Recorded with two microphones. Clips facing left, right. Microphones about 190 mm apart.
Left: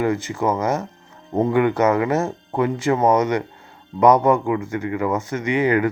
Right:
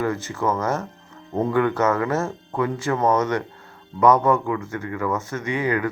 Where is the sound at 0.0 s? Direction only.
15° left (ahead or behind).